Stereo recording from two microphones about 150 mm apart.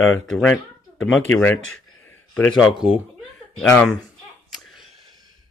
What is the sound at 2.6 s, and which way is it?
Speech, 5° right (ahead or behind).